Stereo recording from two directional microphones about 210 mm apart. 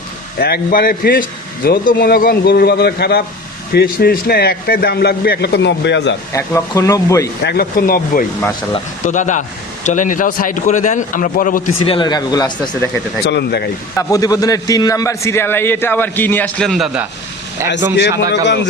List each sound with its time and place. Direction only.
0.3 s a man's voice: 45° left (ahead or behind)
6.3 s a man's voice: 15° left (ahead or behind)
7.4 s a man's voice: 45° left (ahead or behind)
11.8 s speech: 20° left (ahead or behind)
13.2 s a man's voice: 50° left (ahead or behind)
13.9 s a man's voice: 15° left (ahead or behind); by 17.1 s 5° right (ahead or behind)
17.9 s a man's voice: 55° left (ahead or behind)